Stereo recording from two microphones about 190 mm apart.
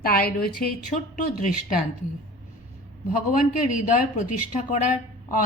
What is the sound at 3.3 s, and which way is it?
Speech, 45° left (ahead or behind).